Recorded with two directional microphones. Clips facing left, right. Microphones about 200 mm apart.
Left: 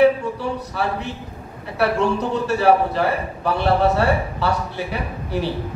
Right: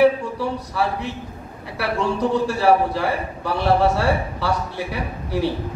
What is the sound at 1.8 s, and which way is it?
Speech, 65° left (ahead or behind).